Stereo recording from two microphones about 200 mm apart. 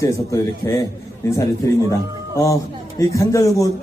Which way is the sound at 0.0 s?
15° left (ahead or behind).